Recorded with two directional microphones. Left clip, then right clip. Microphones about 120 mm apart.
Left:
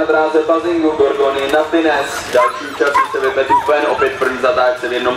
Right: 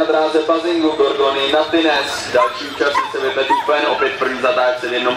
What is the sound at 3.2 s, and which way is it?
A man's voice, 5° left (ahead or behind).